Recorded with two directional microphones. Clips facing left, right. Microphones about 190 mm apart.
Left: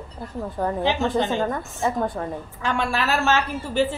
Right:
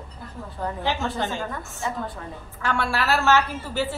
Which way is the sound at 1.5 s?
45° left (ahead or behind).